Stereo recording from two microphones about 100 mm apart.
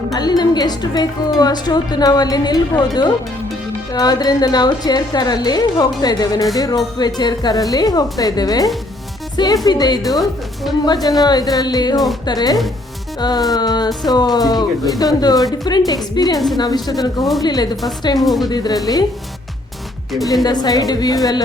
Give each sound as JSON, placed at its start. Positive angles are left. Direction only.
{"t": 0.1, "sound": "a woman's voice", "side_deg": 45}
{"t": 10.2, "sound": "a woman's voice", "side_deg": 0}
{"t": 10.8, "sound": "a woman's voice", "side_deg": 40}
{"t": 18.2, "sound": "a woman's voice", "side_deg": 0}
{"t": 18.4, "sound": "speech", "side_deg": 40}
{"t": 20.4, "sound": "speech", "side_deg": 40}